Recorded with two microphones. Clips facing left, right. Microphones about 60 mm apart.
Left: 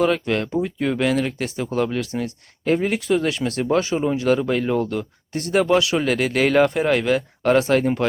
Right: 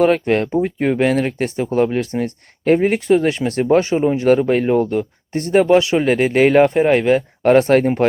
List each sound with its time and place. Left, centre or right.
0.0 s speech: right
3.9 s speech: right